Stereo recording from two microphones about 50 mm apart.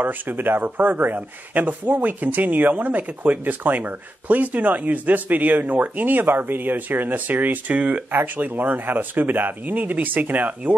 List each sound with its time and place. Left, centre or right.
0.0 s speech: right